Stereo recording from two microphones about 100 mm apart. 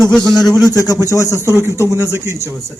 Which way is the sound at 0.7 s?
35° left (ahead or behind).